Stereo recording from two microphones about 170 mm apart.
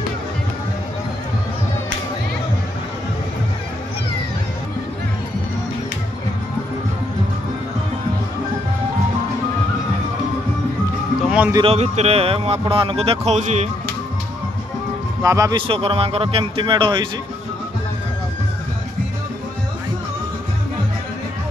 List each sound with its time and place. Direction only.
11.2 s music: 5° right (ahead or behind)
11.6 s speech: 40° right (ahead or behind)
15.2 s speech: 20° right (ahead or behind)
15.6 s speech: 35° right (ahead or behind)